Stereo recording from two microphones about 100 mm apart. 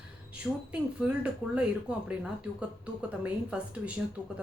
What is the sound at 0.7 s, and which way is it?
Speech, 10° right (ahead or behind).